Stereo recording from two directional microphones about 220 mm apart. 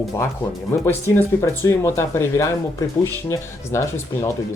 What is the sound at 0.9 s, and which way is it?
Speech, 10° left (ahead or behind).